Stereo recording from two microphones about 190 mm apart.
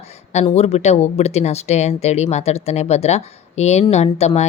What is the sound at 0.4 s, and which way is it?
Speech, 35° left (ahead or behind).